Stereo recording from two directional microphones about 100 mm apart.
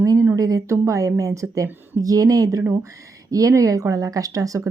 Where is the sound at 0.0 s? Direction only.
35° right (ahead or behind).